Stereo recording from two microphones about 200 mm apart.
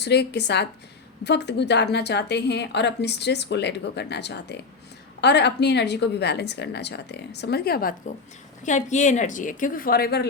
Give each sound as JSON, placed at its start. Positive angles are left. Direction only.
{"t": 0.0, "sound": "a woman's voice", "side_deg": 55}
{"t": 8.6, "sound": "speech", "side_deg": 35}